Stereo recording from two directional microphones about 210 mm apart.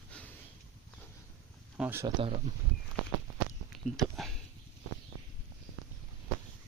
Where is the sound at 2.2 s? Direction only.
30° right (ahead or behind).